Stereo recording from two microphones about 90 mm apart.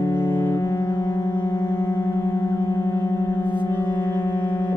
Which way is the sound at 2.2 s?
40° left (ahead or behind).